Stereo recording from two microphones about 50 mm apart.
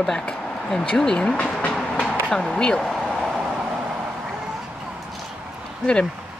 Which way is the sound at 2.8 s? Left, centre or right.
Centre.